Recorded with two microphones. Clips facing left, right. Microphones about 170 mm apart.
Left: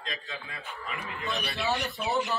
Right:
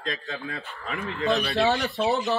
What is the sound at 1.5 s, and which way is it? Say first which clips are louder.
Speech: right 7 dB; 70° right (ahead or behind).